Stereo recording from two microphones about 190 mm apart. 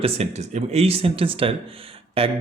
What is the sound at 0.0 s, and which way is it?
Speech, 35° right (ahead or behind).